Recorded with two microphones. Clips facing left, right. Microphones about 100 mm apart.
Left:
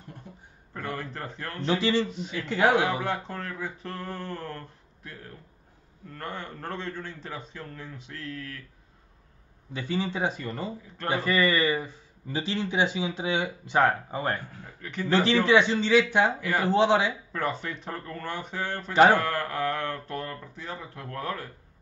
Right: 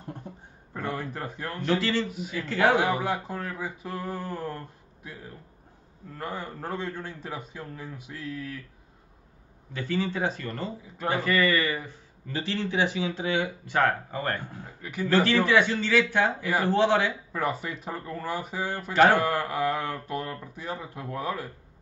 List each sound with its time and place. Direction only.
0.7 s a man's voice: 10° right (ahead or behind)
1.7 s speech: 15° left (ahead or behind)
2.0 s a man's voice: 10° right (ahead or behind)
2.4 s speech: 15° left (ahead or behind)
2.8 s a man's voice: 10° right (ahead or behind)
9.7 s speech: 15° left (ahead or behind)
14.8 s a man's voice: 5° right (ahead or behind)
15.2 s a man's voice: 20° left (ahead or behind)
16.3 s a man's voice: 10° right (ahead or behind)
16.6 s speech: 15° left (ahead or behind)
17.3 s a man's voice: 10° right (ahead or behind)